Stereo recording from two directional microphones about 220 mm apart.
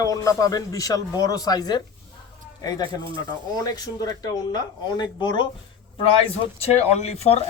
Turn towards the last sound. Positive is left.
turn(degrees=25)  # may be behind; listen again after turning